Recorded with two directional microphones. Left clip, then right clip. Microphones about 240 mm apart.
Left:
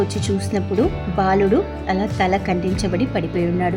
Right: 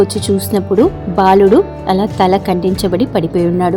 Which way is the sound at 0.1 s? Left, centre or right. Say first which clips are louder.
Right 8 dB; right.